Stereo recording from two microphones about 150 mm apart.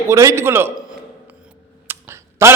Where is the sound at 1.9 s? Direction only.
15° right (ahead or behind).